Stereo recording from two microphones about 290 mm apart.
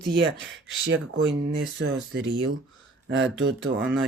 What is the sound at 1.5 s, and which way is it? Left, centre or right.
Speech, right.